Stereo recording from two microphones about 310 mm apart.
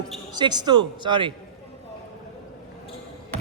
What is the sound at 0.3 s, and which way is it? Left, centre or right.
Speech, centre.